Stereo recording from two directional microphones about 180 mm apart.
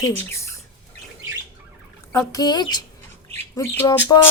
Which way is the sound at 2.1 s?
20° left (ahead or behind).